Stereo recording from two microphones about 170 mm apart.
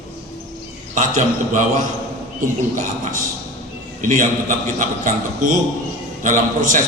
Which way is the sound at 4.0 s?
50° right (ahead or behind).